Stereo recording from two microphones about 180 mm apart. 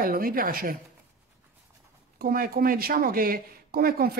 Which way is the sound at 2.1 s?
55° right (ahead or behind).